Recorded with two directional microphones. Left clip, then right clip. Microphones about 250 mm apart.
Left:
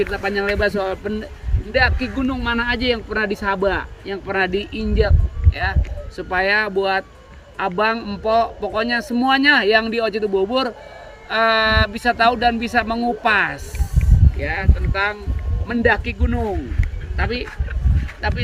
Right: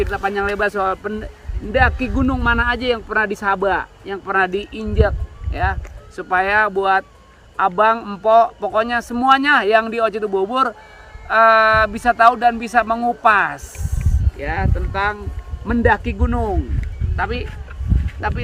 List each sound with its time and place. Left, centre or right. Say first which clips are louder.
0.0 s speech: right 1 dB; centre
6.1 s speech: right 2 dB; centre